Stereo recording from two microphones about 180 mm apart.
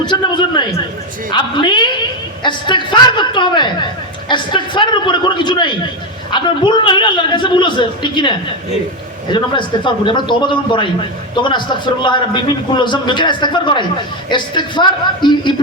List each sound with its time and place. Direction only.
0.0 s a man's voice: 25° left (ahead or behind)
9.3 s a man's voice: 25° left (ahead or behind)